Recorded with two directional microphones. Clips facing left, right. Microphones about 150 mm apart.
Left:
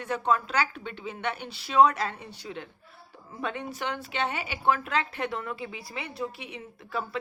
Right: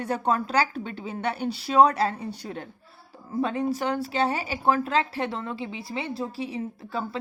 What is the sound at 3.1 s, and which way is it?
Speech, 35° right (ahead or behind).